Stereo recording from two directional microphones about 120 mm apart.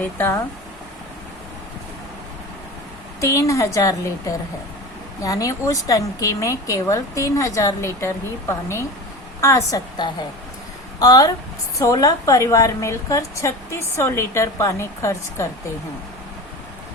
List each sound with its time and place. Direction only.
0.0 s a woman's voice: 20° left (ahead or behind)
3.2 s a woman's voice: 25° left (ahead or behind)
11.0 s a woman's voice: 30° left (ahead or behind)